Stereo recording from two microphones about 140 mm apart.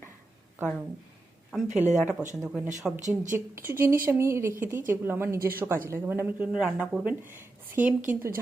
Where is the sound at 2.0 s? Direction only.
5° right (ahead or behind).